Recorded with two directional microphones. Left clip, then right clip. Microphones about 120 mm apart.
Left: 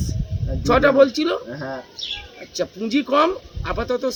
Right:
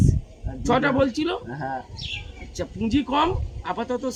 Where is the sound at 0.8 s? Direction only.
20° right (ahead or behind).